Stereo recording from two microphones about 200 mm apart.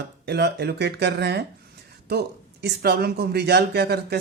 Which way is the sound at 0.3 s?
55° right (ahead or behind).